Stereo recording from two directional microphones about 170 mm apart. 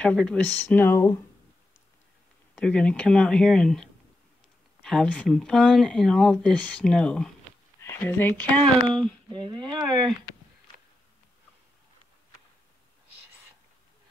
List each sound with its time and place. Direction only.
0.0 s speech: 5° left (ahead or behind)
2.5 s speech: 5° left (ahead or behind)
9.3 s speech: 25° right (ahead or behind)